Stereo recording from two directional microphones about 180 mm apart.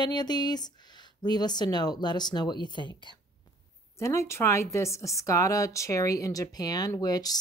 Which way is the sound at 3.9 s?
15° left (ahead or behind).